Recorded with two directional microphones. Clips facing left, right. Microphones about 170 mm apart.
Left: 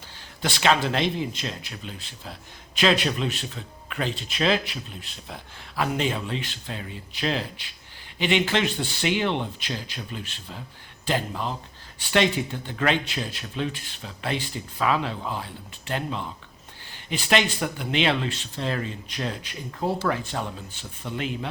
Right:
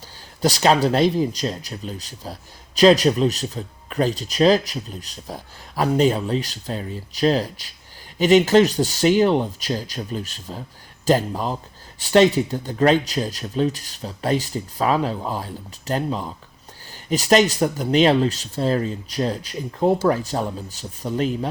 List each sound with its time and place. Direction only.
0.4 s speech: 40° right (ahead or behind)